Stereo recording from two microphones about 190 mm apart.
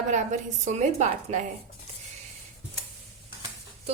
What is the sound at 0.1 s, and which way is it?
A woman's voice, 40° right (ahead or behind).